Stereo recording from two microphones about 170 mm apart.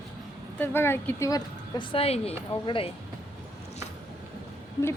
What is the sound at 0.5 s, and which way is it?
A woman's voice, 10° left (ahead or behind).